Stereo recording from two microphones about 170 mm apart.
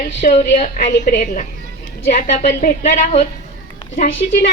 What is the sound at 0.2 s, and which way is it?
A woman's voice, 55° left (ahead or behind).